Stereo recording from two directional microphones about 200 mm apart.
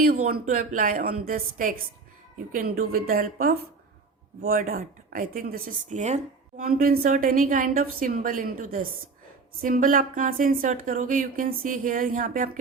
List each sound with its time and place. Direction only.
0.0 s speech: 45° right (ahead or behind)